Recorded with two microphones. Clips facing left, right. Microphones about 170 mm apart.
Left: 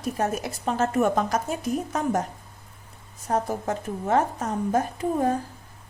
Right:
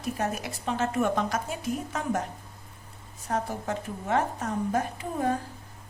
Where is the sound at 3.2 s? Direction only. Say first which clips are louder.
Left 4 dB; 40° left (ahead or behind).